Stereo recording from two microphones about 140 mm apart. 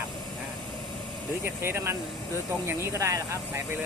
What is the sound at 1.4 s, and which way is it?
Speech, 15° right (ahead or behind).